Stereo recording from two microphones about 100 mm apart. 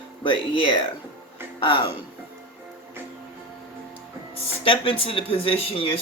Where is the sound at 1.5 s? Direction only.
60° left (ahead or behind).